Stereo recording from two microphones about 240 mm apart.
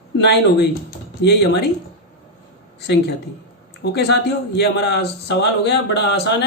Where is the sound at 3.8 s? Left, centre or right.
Left.